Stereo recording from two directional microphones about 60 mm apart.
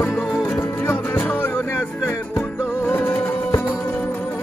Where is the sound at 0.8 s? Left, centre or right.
Left.